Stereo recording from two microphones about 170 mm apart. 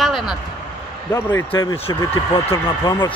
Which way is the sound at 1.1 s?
15° left (ahead or behind).